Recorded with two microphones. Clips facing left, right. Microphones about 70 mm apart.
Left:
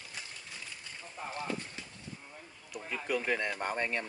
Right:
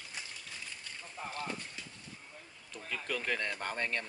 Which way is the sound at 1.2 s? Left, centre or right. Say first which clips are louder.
Left 1 dB; centre.